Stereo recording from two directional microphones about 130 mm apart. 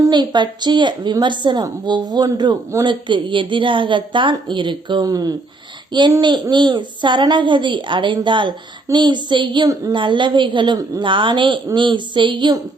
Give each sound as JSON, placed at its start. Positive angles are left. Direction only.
{"t": 0.0, "sound": "a woman's voice", "side_deg": -35}